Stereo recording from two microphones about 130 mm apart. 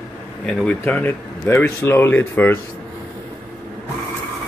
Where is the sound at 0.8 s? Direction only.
15° left (ahead or behind).